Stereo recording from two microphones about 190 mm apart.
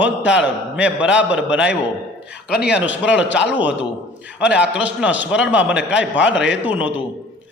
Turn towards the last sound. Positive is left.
turn(degrees=-10)  # may be behind; listen again after turning